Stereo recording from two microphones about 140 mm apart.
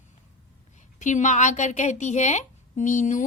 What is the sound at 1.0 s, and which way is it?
A woman's voice, 60° left (ahead or behind).